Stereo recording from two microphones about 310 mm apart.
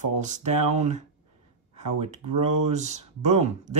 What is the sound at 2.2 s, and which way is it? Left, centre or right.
Speech, right.